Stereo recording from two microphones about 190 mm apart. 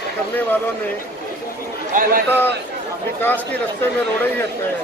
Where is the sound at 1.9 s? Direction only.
45° right (ahead or behind).